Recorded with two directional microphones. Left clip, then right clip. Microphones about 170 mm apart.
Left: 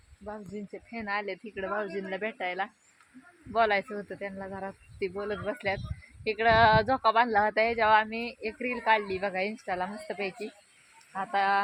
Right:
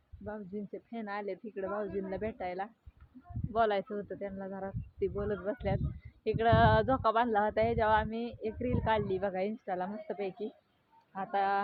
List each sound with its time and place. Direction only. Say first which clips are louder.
0.3 s speech: left 2 dB; 10° left (ahead or behind)